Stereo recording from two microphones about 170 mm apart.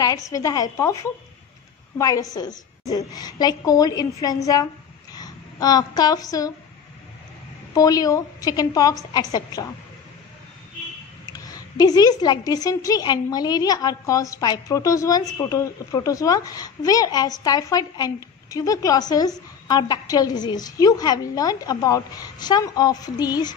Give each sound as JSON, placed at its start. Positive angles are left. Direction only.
{"t": 0.3, "sound": "a woman's voice", "side_deg": 20}
{"t": 7.7, "sound": "a woman's voice", "side_deg": 20}
{"t": 11.2, "sound": "a woman's voice", "side_deg": 20}